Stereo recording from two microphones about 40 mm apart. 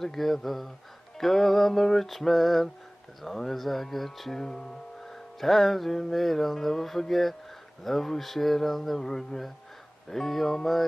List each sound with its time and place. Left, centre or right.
0.0 s mantra: centre
5.4 s mantra: centre